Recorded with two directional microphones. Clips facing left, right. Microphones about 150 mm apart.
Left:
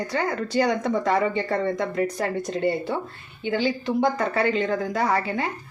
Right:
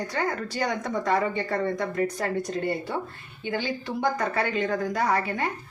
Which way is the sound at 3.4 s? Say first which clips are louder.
Left 5 dB; 20° left (ahead or behind).